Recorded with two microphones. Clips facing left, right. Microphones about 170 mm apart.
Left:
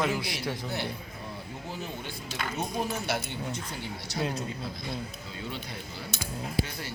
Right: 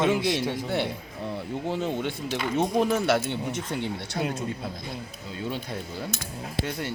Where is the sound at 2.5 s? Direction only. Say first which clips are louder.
Right 9 dB; 90° right.